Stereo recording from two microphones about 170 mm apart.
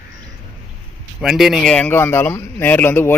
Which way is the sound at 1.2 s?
Centre (ahead or behind).